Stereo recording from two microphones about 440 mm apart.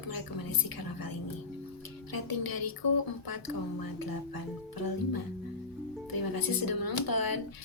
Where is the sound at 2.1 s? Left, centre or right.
Left.